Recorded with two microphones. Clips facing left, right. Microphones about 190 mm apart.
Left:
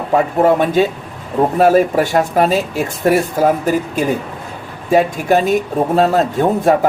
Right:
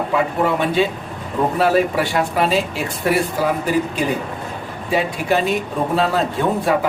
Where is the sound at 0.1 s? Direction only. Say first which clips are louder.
Left 8 dB; 45° left (ahead or behind).